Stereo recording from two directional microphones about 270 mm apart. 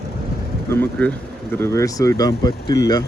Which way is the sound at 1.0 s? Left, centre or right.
Centre.